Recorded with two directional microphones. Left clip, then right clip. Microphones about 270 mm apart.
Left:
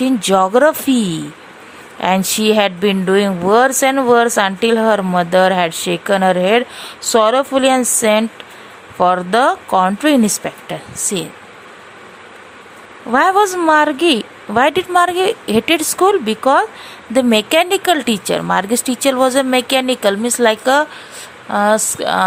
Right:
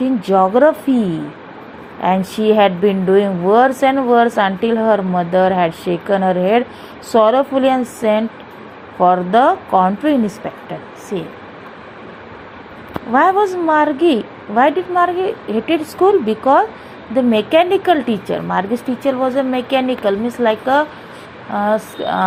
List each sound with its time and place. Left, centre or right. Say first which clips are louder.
0.0 s speech: even; left
2.0 s speech: left 1 dB; left
13.1 s speech: left 1 dB; left